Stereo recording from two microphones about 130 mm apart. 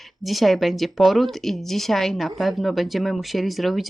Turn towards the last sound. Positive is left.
turn(degrees=0)  # may be behind; listen again after turning